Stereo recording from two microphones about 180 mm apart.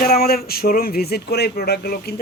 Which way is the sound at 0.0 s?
60° left (ahead or behind).